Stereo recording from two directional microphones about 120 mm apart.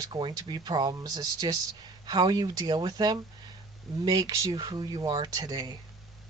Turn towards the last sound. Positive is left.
turn(degrees=-35)  # may be behind; listen again after turning